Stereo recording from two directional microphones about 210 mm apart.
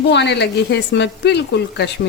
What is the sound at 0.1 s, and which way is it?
A woman's voice, 55° left (ahead or behind).